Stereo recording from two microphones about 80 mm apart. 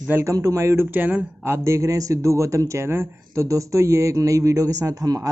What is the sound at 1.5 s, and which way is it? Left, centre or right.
Speech, right.